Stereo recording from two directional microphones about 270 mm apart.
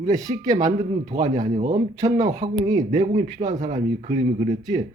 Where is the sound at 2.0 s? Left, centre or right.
Centre.